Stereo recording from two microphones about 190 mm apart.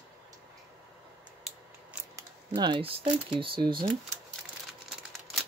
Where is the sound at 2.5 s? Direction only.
25° right (ahead or behind).